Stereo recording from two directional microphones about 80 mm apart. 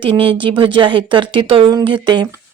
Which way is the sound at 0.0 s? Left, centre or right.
Right.